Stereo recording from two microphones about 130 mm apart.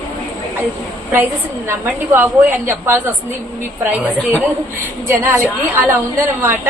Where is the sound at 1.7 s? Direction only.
20° right (ahead or behind).